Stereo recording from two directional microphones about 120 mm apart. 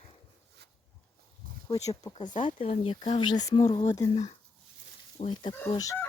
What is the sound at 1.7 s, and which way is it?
Speech, 30° left (ahead or behind).